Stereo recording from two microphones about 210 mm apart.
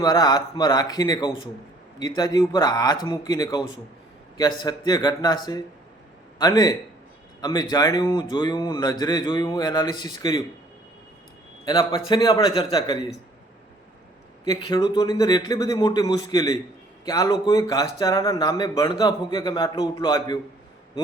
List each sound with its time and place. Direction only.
0.0 s speech: 20° left (ahead or behind)
11.6 s speech: 20° left (ahead or behind)
14.4 s a man's voice: 20° left (ahead or behind)